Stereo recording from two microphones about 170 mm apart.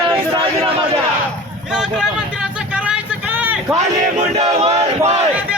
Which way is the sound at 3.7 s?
40° right (ahead or behind).